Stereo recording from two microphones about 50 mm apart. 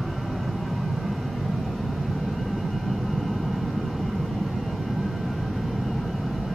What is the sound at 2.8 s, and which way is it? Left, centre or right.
Vehicle, centre.